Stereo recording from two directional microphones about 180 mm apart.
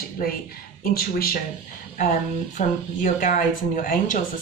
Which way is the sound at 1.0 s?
55° left (ahead or behind).